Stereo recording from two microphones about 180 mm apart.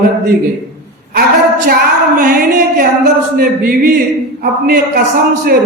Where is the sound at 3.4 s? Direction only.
55° right (ahead or behind).